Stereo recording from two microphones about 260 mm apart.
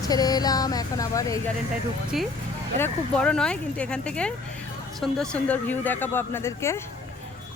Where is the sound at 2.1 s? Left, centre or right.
Centre.